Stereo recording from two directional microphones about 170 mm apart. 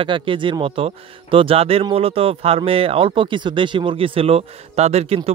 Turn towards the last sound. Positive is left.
turn(degrees=-35)  # may be behind; listen again after turning